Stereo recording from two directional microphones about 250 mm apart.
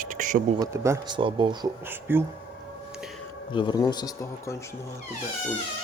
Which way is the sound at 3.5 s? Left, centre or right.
Centre.